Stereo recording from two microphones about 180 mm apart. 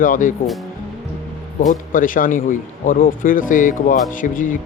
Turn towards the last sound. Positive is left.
turn(degrees=50)  # may be behind; listen again after turning